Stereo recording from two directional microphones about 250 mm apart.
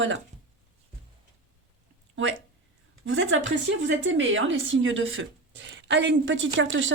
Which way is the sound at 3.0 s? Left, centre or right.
Right.